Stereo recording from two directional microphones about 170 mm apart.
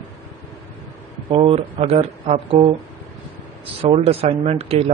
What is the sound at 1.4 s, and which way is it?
A man's voice, 35° right (ahead or behind).